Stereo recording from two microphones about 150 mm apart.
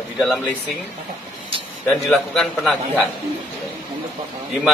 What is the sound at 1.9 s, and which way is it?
A man's voice, centre (ahead or behind).